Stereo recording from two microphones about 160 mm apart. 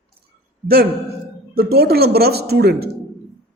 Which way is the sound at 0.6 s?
70° right (ahead or behind).